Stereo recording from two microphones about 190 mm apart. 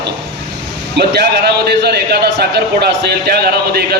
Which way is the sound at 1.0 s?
60° right (ahead or behind).